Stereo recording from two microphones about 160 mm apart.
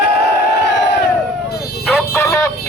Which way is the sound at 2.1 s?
15° left (ahead or behind).